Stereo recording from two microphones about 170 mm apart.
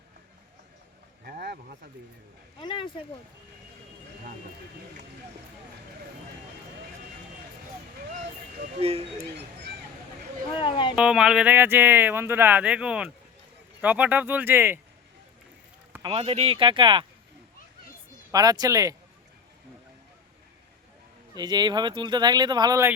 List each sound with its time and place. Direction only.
1.2 s a sound: 70° right (ahead or behind)
2.6 s speech: 25° left (ahead or behind)
8.8 s speech: 35° right (ahead or behind)
10.5 s speech: 30° left (ahead or behind)
10.9 s speech: 5° right (ahead or behind)
16.0 s speech: 35° right (ahead or behind)
18.3 s speech: 20° right (ahead or behind)
21.3 s speech: 25° right (ahead or behind)